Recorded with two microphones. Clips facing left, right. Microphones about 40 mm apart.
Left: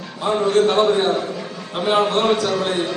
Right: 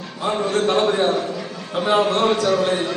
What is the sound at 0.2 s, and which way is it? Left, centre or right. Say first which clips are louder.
A man's voice: left 4 dB; left.